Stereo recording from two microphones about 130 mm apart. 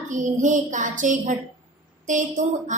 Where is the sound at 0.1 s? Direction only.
75° right (ahead or behind).